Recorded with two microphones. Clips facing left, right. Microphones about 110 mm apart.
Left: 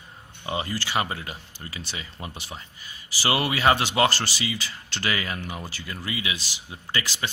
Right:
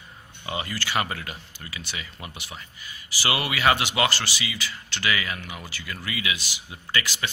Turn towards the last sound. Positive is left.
turn(degrees=30)  # may be behind; listen again after turning